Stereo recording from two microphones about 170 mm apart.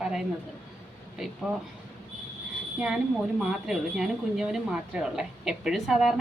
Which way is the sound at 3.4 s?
5° right (ahead or behind).